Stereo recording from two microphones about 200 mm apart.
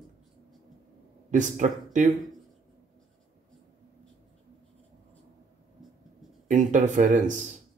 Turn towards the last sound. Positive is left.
turn(degrees=-40)  # may be behind; listen again after turning